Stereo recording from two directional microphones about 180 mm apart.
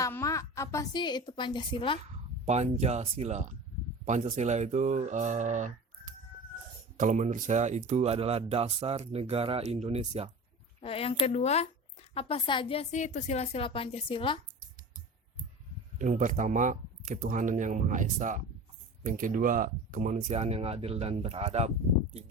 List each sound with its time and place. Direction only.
0.0 s a woman's voice: 15° left (ahead or behind)
2.4 s speech: 35° right (ahead or behind)
10.8 s a woman's voice: 30° left (ahead or behind)
16.0 s speech: 45° right (ahead or behind)